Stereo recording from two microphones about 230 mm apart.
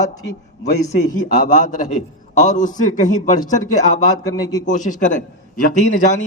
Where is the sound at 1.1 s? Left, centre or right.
Left.